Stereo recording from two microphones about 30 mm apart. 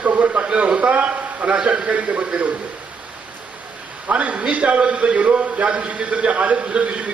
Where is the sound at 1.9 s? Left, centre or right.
Right.